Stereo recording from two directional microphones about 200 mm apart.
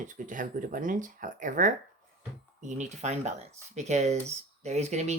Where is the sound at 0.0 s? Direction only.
40° right (ahead or behind).